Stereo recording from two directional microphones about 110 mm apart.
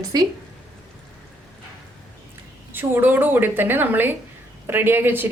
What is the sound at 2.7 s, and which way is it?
A woman's voice, 20° right (ahead or behind).